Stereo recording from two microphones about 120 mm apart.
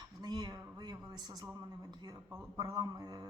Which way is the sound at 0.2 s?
35° right (ahead or behind).